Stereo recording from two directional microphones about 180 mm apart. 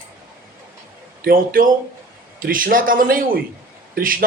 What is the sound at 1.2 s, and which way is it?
Speech, 55° right (ahead or behind).